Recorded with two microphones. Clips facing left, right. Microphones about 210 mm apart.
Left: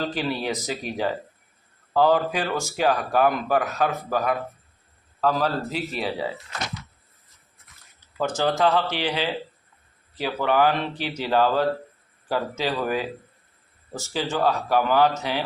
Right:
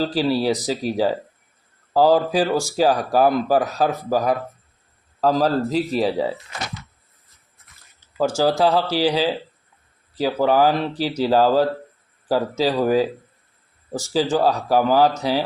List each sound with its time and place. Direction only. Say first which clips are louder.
0.0 s speech: right 7 dB; 35° right (ahead or behind)
8.4 s speech: right 2 dB; 35° right (ahead or behind)
14.1 s speech: right 5 dB; 35° right (ahead or behind)